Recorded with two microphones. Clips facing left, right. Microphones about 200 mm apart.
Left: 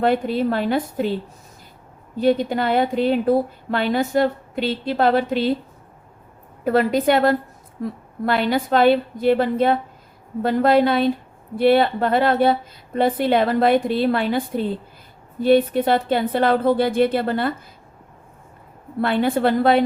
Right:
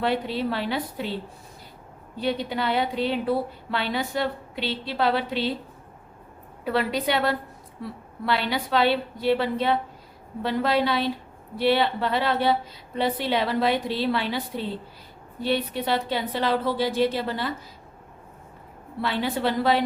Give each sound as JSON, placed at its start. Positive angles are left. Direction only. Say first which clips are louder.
{"t": 0.0, "sound": "speech", "louder": "left 6 dB", "side_deg": 50}
{"t": 2.1, "sound": "speech", "louder": "left 8 dB", "side_deg": 50}
{"t": 6.7, "sound": "speech", "louder": "left 7 dB", "side_deg": 45}
{"t": 19.0, "sound": "speech", "louder": "left 7 dB", "side_deg": 50}